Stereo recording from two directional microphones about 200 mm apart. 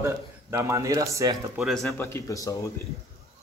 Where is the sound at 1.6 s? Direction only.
Centre (ahead or behind); by 2.7 s 15° left (ahead or behind).